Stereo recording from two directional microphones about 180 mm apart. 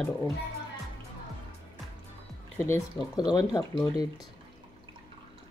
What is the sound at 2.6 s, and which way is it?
Speech, 15° left (ahead or behind).